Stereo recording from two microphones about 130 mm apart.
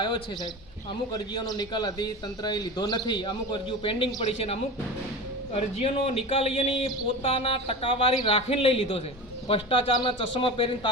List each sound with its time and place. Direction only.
1.1 s a man's voice: 35° left (ahead or behind)